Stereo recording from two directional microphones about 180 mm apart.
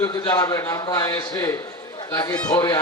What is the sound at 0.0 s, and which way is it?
A man's voice, 20° left (ahead or behind).